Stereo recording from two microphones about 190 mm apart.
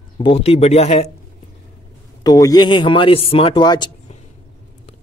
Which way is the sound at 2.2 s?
20° left (ahead or behind).